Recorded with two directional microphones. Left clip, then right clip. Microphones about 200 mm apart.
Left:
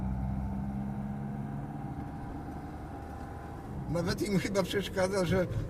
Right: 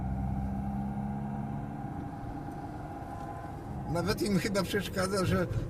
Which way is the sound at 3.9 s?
20° right (ahead or behind).